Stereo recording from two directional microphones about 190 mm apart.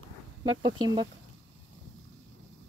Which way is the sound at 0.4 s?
20° right (ahead or behind).